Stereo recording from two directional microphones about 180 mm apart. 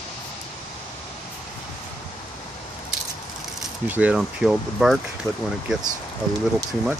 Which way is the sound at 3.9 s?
5° right (ahead or behind).